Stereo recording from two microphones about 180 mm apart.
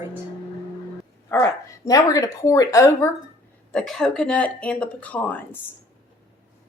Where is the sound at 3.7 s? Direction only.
Centre (ahead or behind).